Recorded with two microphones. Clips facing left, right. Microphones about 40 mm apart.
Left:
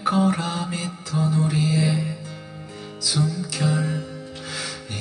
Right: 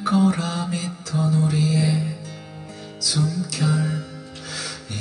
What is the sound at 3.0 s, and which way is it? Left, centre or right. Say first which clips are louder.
Music: right 1 dB; left.